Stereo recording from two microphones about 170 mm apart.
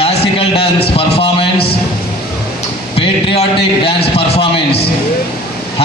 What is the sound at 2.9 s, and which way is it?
A man's voice, 35° left (ahead or behind).